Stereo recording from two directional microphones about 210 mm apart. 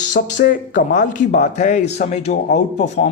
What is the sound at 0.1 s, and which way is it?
Speech, 40° left (ahead or behind).